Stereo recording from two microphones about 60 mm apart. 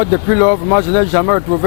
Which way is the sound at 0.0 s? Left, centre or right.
Left.